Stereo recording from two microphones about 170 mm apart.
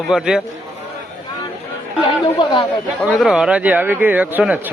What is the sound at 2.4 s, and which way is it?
Speech, 25° left (ahead or behind).